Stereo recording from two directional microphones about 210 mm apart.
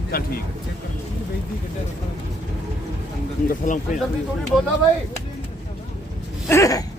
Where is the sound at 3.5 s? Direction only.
35° left (ahead or behind).